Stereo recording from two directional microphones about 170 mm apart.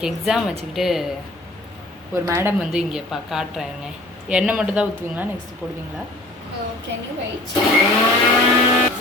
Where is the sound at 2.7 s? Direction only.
5° right (ahead or behind).